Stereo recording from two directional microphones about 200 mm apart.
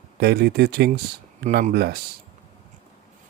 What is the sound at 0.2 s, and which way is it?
Speech, 50° right (ahead or behind).